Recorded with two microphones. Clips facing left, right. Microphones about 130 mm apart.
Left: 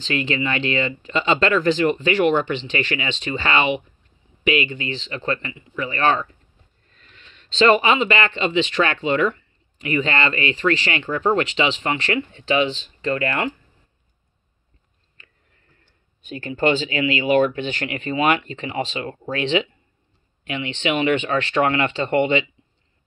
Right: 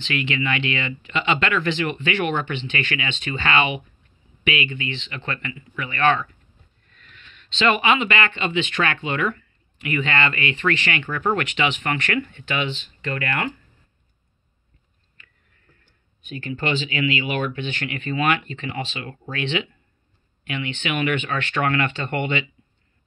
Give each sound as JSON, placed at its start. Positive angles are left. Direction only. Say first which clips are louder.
{"t": 0.0, "sound": "speech", "louder": "left 2 dB", "side_deg": 35}
{"t": 16.3, "sound": "speech", "louder": "left 6 dB", "side_deg": 35}